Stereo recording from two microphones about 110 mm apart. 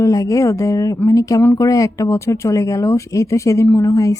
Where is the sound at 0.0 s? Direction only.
30° left (ahead or behind).